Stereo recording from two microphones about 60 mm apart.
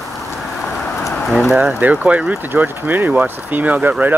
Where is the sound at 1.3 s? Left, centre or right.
Centre.